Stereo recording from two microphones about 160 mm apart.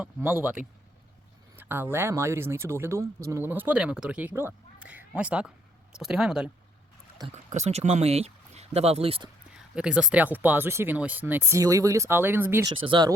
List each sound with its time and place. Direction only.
0.0 s speech: 10° right (ahead or behind)
7.3 s speech: 45° right (ahead or behind)
9.7 s speech: 5° right (ahead or behind)
12.8 s speech: 30° right (ahead or behind)